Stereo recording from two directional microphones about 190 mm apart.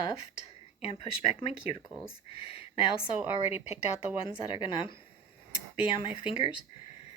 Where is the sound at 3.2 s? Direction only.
10° right (ahead or behind).